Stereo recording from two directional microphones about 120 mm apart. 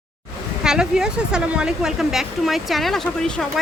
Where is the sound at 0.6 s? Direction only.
5° right (ahead or behind).